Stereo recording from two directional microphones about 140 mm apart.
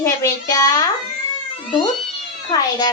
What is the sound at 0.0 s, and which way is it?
Speech, 25° left (ahead or behind).